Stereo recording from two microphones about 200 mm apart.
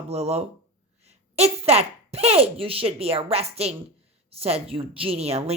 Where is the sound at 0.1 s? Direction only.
30° right (ahead or behind).